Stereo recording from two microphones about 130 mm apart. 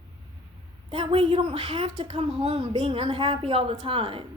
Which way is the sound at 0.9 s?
45° right (ahead or behind).